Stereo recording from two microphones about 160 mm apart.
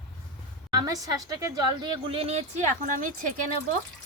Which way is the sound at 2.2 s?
45° right (ahead or behind).